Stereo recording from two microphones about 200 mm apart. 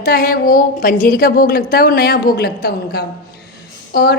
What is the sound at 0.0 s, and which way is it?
A woman's voice, 50° left (ahead or behind).